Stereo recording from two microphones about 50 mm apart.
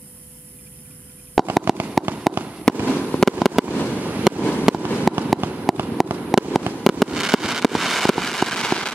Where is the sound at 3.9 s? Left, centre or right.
Right.